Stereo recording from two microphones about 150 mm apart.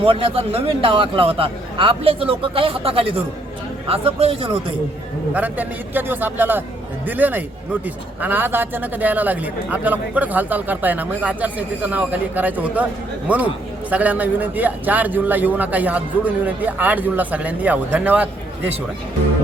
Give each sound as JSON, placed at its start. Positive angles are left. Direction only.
{"t": 0.0, "sound": "a man's voice", "side_deg": -40}
{"t": 5.3, "sound": "a man's voice", "side_deg": -10}